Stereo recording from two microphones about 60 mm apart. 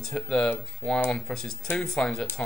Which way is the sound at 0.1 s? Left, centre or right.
Centre.